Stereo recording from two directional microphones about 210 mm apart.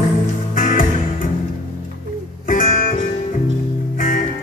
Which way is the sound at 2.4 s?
40° left (ahead or behind).